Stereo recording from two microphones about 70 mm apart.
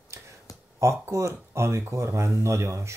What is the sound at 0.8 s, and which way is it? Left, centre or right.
Speech, right.